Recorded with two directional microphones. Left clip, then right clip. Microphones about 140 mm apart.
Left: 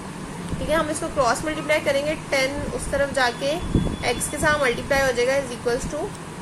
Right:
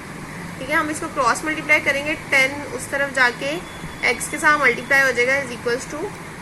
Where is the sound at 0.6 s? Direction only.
20° right (ahead or behind).